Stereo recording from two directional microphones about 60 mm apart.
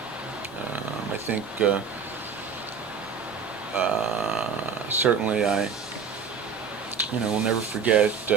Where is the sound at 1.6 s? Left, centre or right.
Right.